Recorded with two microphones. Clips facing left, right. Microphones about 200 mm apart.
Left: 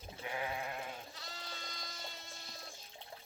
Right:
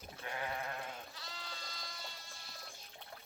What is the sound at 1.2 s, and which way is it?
Sheep, 25° left (ahead or behind).